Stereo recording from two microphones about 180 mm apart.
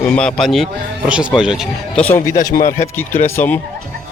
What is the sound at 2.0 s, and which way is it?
Speech, 15° left (ahead or behind).